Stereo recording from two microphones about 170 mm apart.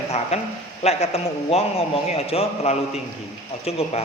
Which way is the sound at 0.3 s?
40° left (ahead or behind).